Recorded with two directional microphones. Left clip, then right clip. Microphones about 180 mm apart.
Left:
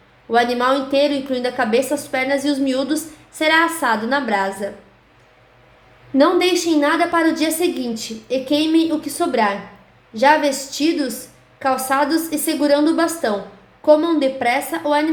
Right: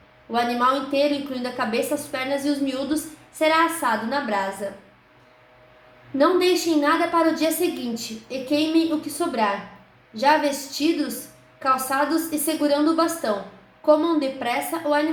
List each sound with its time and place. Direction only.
0.3 s a woman's voice: 55° left (ahead or behind)
6.1 s a woman's voice: 50° left (ahead or behind)